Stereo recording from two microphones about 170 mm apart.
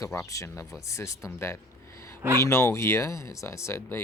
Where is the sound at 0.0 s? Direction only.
20° left (ahead or behind).